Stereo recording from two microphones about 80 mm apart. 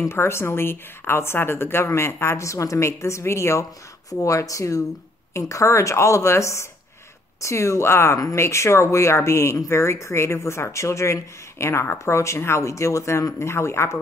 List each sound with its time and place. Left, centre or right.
0.1 s speech: left